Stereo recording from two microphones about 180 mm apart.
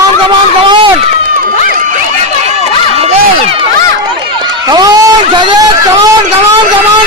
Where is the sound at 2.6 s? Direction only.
35° right (ahead or behind).